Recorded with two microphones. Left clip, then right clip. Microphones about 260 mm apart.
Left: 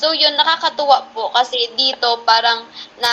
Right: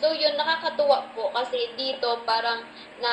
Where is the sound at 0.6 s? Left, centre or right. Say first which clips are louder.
Left 8 dB; left.